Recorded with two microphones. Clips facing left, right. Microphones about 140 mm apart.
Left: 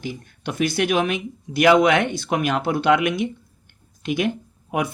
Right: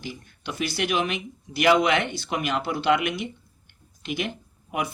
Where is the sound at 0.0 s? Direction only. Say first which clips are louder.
Left 6 dB; 50° left (ahead or behind).